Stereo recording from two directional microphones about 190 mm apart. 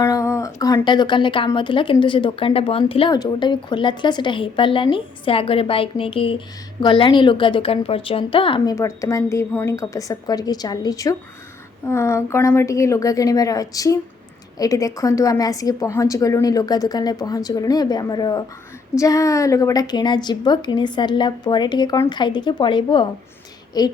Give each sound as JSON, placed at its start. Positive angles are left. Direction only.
{"t": 0.0, "sound": "a woman's voice", "side_deg": 15}